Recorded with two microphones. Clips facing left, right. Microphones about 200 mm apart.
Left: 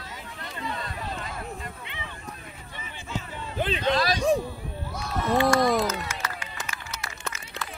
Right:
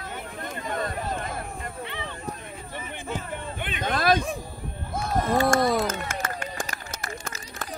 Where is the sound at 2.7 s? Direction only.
55° right (ahead or behind).